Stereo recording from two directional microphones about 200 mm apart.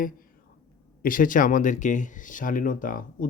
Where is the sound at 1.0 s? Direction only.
45° left (ahead or behind).